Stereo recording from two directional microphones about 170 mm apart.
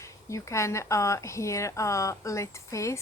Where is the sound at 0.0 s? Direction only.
15° left (ahead or behind).